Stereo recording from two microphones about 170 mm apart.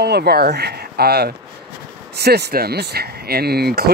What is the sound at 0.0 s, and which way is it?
Speech, 70° right (ahead or behind).